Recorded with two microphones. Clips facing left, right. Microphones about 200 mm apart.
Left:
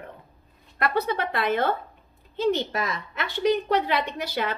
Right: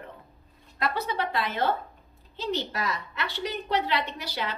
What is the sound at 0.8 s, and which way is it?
A woman's voice, 55° left (ahead or behind).